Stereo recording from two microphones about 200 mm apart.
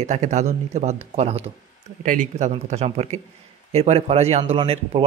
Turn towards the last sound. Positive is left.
turn(degrees=-30)  # may be behind; listen again after turning